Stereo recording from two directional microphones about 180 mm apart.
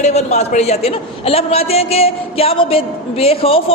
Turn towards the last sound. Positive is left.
turn(degrees=35)  # may be behind; listen again after turning